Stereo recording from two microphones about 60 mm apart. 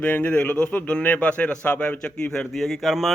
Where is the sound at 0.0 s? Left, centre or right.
Left.